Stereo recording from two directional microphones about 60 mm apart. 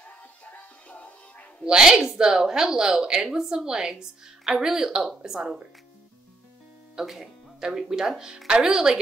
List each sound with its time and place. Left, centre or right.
0.0 s music: left
1.6 s a woman's voice: centre
7.0 s a woman's voice: centre